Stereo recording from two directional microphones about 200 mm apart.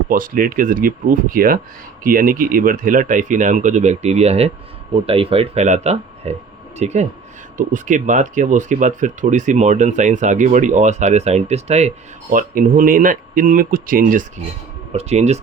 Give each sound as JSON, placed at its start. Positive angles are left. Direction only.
{"t": 0.1, "sound": "speech", "side_deg": -45}